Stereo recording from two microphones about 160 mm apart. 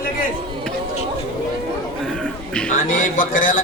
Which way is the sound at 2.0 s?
5° left (ahead or behind).